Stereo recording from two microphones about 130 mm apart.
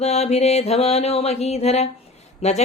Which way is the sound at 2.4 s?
60° left (ahead or behind).